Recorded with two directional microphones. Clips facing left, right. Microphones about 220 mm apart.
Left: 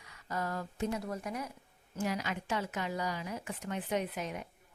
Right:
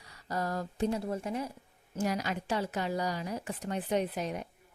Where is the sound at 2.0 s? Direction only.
40° right (ahead or behind).